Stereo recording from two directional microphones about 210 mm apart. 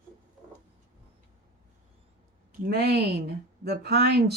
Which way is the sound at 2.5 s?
45° right (ahead or behind).